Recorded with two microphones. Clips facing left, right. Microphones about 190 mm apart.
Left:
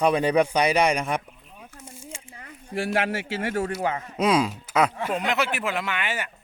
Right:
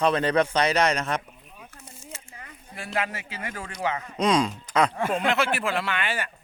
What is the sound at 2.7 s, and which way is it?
Speech, 90° left.